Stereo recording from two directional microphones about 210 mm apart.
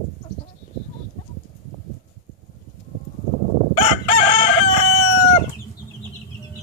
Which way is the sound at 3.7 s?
35° left (ahead or behind).